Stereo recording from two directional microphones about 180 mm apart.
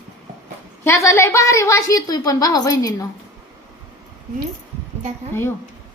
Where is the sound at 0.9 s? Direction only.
15° left (ahead or behind).